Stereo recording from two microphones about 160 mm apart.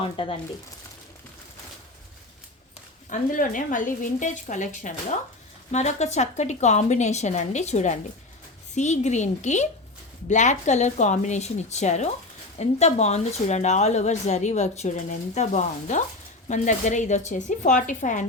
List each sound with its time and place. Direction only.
0.0 s speech: 35° left (ahead or behind)
3.1 s speech: 55° left (ahead or behind)